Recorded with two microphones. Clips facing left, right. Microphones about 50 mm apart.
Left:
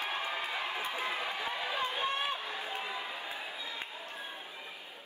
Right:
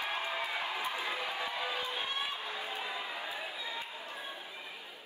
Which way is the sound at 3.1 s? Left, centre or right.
Right.